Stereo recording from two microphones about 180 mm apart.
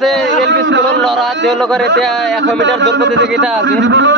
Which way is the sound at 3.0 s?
80° right.